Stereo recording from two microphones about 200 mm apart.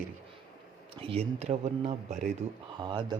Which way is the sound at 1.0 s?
30° right (ahead or behind).